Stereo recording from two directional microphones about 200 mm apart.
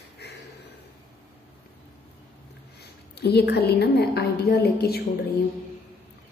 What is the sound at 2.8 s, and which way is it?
A woman's voice, 55° left (ahead or behind).